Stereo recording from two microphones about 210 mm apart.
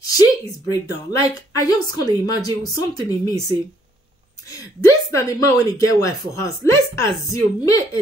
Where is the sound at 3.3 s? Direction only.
15° right (ahead or behind).